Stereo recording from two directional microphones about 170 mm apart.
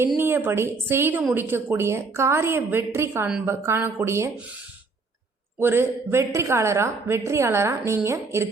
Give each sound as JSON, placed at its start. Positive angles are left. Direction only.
{"t": 0.2, "sound": "a woman's voice", "side_deg": -10}
{"t": 5.5, "sound": "a woman's voice", "side_deg": -15}